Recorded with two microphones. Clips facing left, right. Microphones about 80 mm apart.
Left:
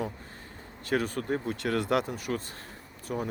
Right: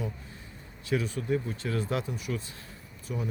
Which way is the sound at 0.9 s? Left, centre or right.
Left.